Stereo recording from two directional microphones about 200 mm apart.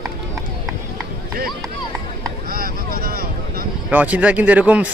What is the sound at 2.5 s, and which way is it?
Vehicle, 45° right (ahead or behind).